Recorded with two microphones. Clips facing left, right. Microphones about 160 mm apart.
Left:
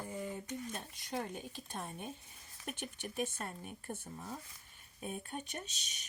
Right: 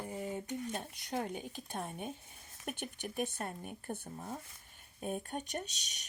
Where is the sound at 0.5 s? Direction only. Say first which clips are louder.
Right 4 dB; 60° right (ahead or behind); by 5.3 s 45° right (ahead or behind).